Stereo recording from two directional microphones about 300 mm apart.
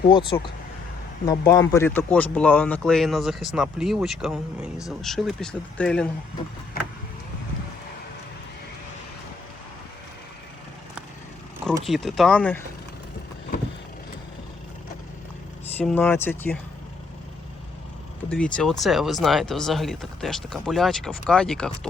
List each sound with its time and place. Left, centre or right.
0.1 s speech: centre
11.7 s speech: centre
15.8 s speech: centre
18.3 s speech: centre